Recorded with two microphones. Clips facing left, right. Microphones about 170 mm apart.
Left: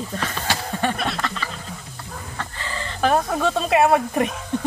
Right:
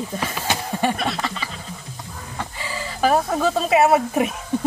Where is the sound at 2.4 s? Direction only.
10° right (ahead or behind).